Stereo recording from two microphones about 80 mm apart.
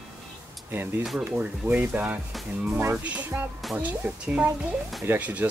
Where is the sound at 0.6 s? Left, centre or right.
Right.